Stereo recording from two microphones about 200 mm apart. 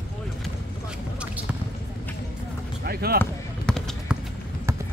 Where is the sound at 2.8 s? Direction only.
50° right (ahead or behind).